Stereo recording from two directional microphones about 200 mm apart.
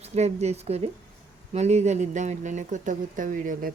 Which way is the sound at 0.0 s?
35° right (ahead or behind).